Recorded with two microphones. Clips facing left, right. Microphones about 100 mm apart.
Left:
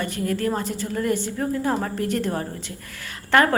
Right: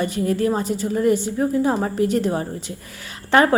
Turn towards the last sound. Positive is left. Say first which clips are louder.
# right 2 dB
turn(degrees=-20)  # may be behind; listen again after turning